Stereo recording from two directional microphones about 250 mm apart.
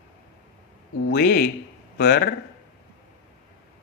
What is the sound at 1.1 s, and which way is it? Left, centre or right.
Speech, left.